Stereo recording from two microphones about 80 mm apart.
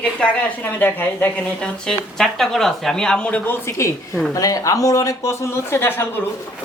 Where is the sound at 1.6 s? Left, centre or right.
Centre.